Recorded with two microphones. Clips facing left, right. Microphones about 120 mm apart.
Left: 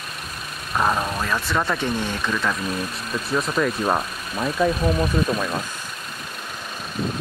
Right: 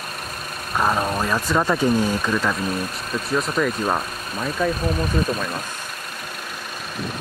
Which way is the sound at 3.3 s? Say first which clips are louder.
Even; centre (ahead or behind).